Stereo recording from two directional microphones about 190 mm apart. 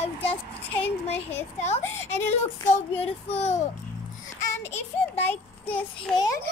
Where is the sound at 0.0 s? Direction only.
30° left (ahead or behind).